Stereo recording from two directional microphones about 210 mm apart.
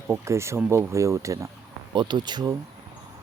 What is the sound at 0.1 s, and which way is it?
Speech, 15° right (ahead or behind).